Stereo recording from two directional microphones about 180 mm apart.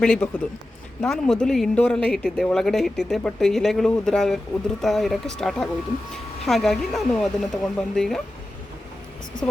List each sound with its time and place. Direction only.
0.0 s speech: 5° left (ahead or behind)